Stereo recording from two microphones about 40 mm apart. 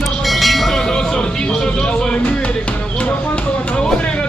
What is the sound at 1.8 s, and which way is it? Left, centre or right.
Music, centre.